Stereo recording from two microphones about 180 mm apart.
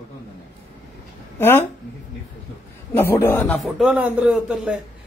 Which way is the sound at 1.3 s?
10° left (ahead or behind).